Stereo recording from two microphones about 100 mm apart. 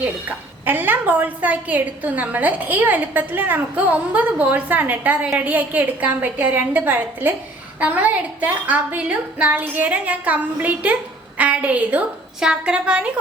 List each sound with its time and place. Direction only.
0.0 s a woman's voice: 20° right (ahead or behind)